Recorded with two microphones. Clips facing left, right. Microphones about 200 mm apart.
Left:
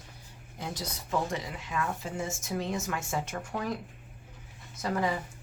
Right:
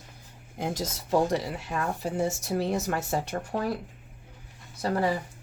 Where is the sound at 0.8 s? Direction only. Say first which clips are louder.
Right 7 dB; 35° right (ahead or behind).